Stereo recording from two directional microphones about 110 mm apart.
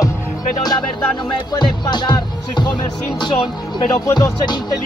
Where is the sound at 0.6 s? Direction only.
40° left (ahead or behind).